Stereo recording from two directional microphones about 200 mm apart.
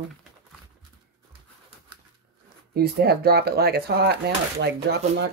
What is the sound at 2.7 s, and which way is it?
Speech, 50° right (ahead or behind).